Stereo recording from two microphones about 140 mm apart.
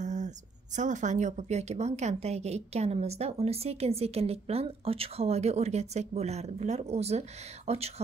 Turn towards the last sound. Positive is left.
turn(degrees=-50)  # may be behind; listen again after turning